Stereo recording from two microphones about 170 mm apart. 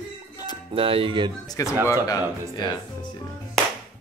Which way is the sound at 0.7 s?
35° right (ahead or behind).